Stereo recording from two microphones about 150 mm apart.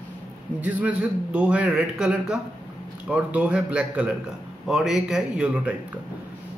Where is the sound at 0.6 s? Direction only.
10° right (ahead or behind).